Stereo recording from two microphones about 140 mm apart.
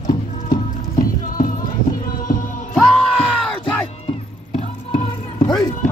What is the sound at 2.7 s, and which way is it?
Music, 5° left (ahead or behind).